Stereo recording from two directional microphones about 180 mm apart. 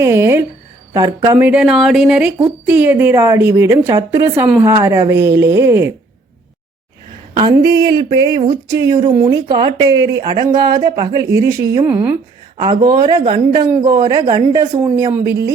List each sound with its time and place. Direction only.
0.0 s a woman's voice: 15° right (ahead or behind)
4.4 s speech: 5° right (ahead or behind)
4.7 s a woman's voice: 15° right (ahead or behind)
7.5 s a woman's voice: 20° right (ahead or behind)
12.5 s speech: 25° right (ahead or behind)